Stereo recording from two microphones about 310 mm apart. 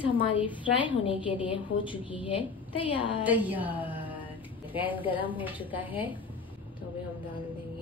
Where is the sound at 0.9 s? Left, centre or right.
Centre.